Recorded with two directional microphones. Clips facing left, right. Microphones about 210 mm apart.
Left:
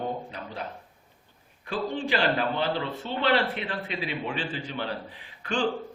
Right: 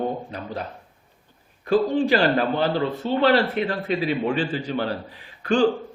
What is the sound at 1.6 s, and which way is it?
A man's voice, 40° right (ahead or behind).